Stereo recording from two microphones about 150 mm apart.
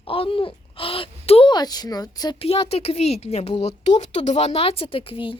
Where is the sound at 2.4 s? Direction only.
40° left (ahead or behind).